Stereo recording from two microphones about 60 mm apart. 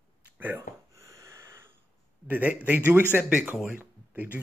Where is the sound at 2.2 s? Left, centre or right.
Right.